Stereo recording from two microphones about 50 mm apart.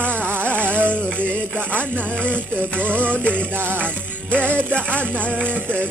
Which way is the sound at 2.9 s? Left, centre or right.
Right.